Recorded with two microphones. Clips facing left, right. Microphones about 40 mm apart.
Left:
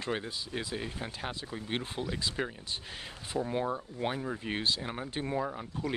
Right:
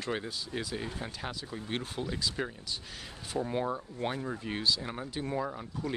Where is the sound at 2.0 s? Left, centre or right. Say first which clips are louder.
Even; left.